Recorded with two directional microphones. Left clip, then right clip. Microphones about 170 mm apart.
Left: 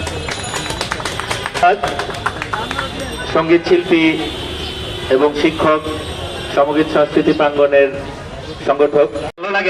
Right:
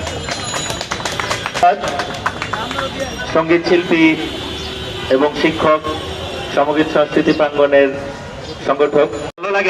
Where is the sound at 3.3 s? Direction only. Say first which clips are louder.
Left 1 dB; 45° left (ahead or behind).